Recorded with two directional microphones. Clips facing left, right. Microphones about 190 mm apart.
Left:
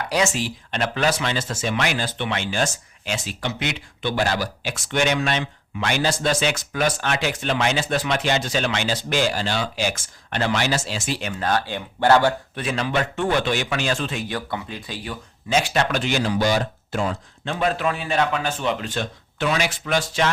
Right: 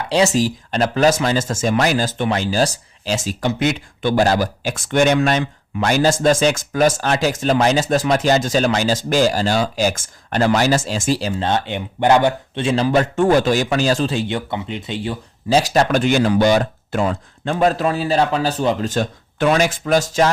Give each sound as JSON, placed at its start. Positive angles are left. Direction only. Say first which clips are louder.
{"t": 0.1, "sound": "speech", "louder": "right 8 dB", "side_deg": -35}
{"t": 11.2, "sound": "speech", "louder": "right 3 dB", "side_deg": -30}